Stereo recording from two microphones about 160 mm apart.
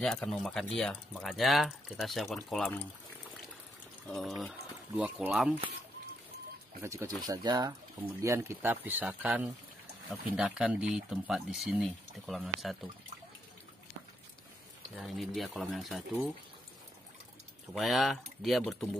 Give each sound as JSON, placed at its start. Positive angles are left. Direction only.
{"t": 0.0, "sound": "speech", "side_deg": 5}
{"t": 4.1, "sound": "speech", "side_deg": 0}
{"t": 6.8, "sound": "speech", "side_deg": -15}
{"t": 7.2, "sound": "speech", "side_deg": -25}
{"t": 8.0, "sound": "speech", "side_deg": -15}
{"t": 15.0, "sound": "speech", "side_deg": 0}
{"t": 17.7, "sound": "speech", "side_deg": 0}